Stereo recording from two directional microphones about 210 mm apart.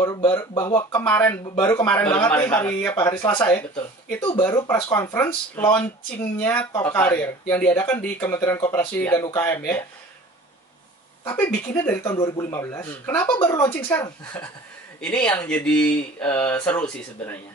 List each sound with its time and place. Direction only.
0.0 s speech: 15° left (ahead or behind)
1.4 s speech: 25° left (ahead or behind)
1.7 s speech: 10° left (ahead or behind)
11.2 s speech: 10° left (ahead or behind)